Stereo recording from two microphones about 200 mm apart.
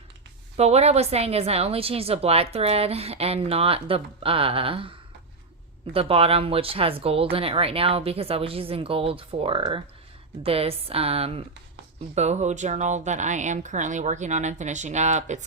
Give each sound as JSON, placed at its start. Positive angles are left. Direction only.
{"t": 0.5, "sound": "a woman's voice", "side_deg": -30}